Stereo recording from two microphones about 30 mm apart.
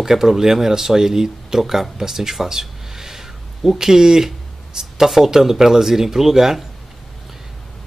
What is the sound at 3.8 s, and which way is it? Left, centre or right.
Speech, centre.